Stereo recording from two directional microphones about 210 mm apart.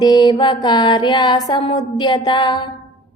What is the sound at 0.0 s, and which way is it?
A woman's voice, 20° left (ahead or behind).